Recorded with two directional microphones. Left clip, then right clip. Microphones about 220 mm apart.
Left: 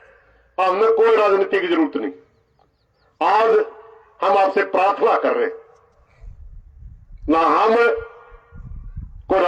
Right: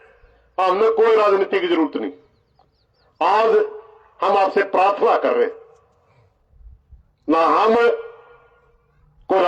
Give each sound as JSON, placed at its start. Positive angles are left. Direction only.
{"t": 0.5, "sound": "a man's voice", "side_deg": -50}
{"t": 3.2, "sound": "a man's voice", "side_deg": -55}
{"t": 7.3, "sound": "speech", "side_deg": -55}